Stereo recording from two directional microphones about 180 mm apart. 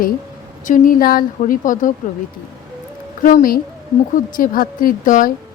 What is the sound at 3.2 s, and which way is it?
A woman's voice, 50° left (ahead or behind).